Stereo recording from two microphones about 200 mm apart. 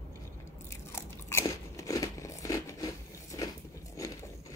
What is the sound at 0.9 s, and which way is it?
Crunch, 15° left (ahead or behind).